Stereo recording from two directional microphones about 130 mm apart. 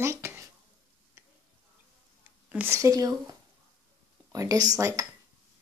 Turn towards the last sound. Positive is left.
turn(degrees=-25)  # may be behind; listen again after turning